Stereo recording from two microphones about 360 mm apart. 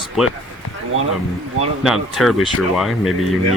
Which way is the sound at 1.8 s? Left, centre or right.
Centre.